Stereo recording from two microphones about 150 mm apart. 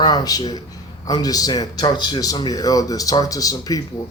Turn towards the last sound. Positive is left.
turn(degrees=25)  # may be behind; listen again after turning